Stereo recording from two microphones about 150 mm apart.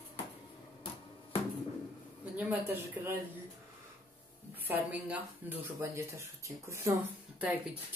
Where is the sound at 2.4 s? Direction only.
10° right (ahead or behind).